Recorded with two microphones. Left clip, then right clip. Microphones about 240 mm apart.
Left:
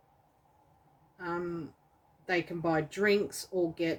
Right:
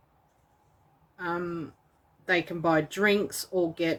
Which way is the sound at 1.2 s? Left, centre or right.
Right.